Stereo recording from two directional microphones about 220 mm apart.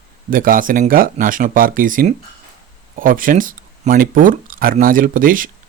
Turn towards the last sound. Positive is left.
turn(degrees=-40)  # may be behind; listen again after turning